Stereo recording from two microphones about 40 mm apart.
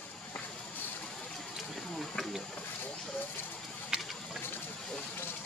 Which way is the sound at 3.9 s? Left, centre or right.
Right.